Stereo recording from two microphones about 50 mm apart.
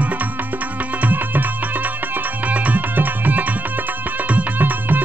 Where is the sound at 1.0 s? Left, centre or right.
Right.